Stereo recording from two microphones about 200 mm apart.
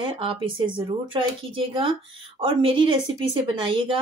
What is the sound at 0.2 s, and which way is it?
Speech, 25° right (ahead or behind).